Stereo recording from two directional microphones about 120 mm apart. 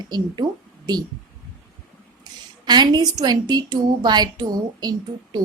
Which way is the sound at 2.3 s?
35° right (ahead or behind).